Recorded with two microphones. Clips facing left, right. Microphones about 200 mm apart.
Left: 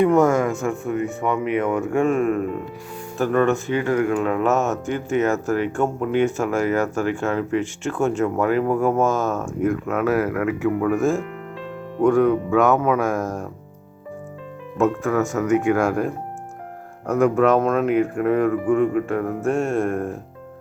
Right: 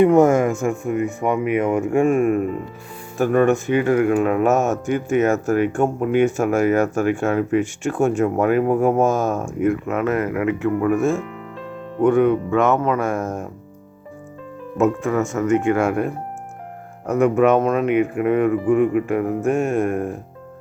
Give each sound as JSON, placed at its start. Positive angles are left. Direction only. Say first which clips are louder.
{"t": 0.0, "sound": "speech", "louder": "right 3 dB", "side_deg": -15}
{"t": 0.3, "sound": "speech", "louder": "right 2 dB", "side_deg": -50}
{"t": 0.6, "sound": "speech", "louder": "right 2 dB", "side_deg": -15}
{"t": 14.8, "sound": "speech", "louder": "right 1 dB", "side_deg": -5}